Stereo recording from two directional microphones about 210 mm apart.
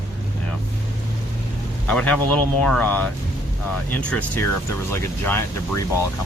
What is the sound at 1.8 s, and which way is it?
Speech, 5° left (ahead or behind).